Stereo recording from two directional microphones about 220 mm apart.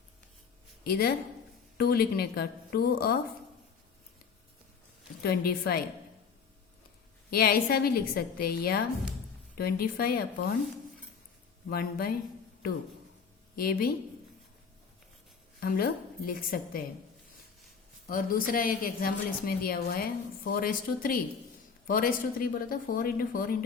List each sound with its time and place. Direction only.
0.9 s a woman's voice: 45° left (ahead or behind)
5.2 s a woman's voice: 45° left (ahead or behind)
7.3 s a woman's voice: 45° left (ahead or behind)
11.7 s a woman's voice: 45° left (ahead or behind)
13.6 s a woman's voice: 45° left (ahead or behind)
15.6 s a woman's voice: 40° left (ahead or behind)
18.1 s a woman's voice: 40° left (ahead or behind)